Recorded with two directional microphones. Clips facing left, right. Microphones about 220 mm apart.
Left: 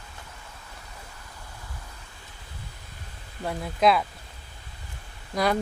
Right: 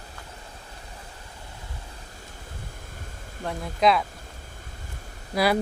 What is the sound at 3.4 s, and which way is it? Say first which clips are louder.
Speech: even; centre (ahead or behind).